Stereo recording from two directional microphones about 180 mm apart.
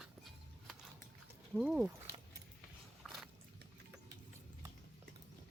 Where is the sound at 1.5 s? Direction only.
5° right (ahead or behind).